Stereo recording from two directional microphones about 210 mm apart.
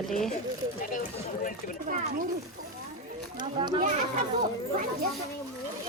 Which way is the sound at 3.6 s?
20° right (ahead or behind).